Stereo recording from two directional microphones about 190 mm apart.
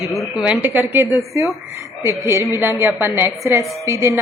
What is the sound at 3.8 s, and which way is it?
Speech, 15° right (ahead or behind).